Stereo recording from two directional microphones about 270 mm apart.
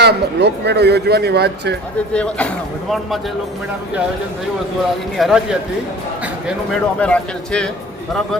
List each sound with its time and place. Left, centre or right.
0.0 s speech: right
2.1 s speech: centre
5.1 s speech: centre
6.7 s speech: centre